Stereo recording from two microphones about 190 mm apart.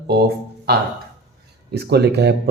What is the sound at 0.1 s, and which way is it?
Speech, 55° right (ahead or behind).